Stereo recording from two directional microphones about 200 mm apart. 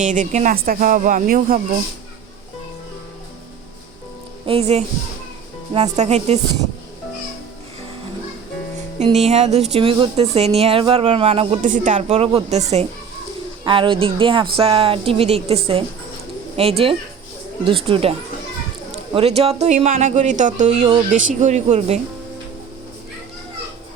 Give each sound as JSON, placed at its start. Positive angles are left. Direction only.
{"t": 0.0, "sound": "a woman's voice", "side_deg": -40}
{"t": 4.4, "sound": "a woman's voice", "side_deg": -30}
{"t": 9.0, "sound": "a woman's voice", "side_deg": -35}
{"t": 13.7, "sound": "a woman's voice", "side_deg": -25}
{"t": 19.1, "sound": "a woman's voice", "side_deg": -30}